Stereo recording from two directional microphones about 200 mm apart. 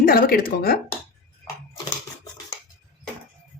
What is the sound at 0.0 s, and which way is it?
Speech, 45° left (ahead or behind).